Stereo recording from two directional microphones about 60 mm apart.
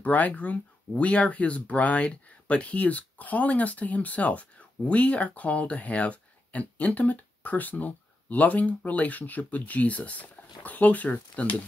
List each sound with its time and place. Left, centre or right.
0.0 s speech: left